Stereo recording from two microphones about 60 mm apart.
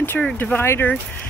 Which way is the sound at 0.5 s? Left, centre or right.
Left.